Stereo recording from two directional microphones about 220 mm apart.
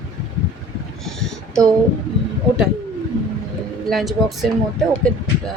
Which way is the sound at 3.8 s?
Centre (ahead or behind).